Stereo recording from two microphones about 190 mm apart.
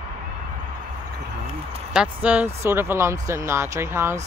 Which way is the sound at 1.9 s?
5° right (ahead or behind).